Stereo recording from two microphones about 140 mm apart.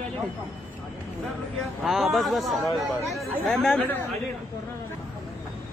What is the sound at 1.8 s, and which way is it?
Speech, centre (ahead or behind).